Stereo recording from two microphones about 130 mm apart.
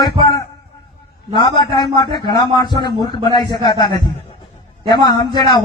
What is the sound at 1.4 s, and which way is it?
A man's voice, 35° left (ahead or behind).